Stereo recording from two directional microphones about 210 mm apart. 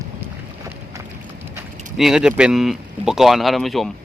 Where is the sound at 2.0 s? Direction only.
5° right (ahead or behind).